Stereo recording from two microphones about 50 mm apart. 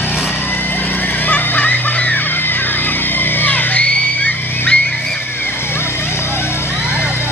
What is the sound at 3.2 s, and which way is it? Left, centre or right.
Music, left.